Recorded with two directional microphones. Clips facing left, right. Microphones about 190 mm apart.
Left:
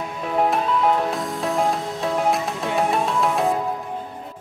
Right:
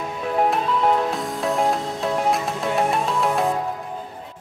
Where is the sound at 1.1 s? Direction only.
Centre (ahead or behind).